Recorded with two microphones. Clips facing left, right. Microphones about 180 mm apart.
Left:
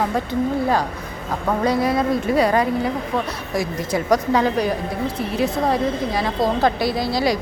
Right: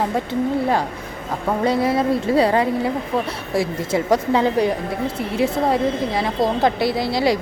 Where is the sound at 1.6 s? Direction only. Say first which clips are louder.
Right 1 dB; 25° right (ahead or behind).